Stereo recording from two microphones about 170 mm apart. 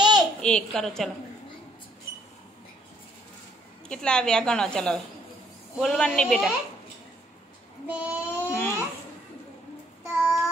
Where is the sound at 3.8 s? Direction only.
5° left (ahead or behind).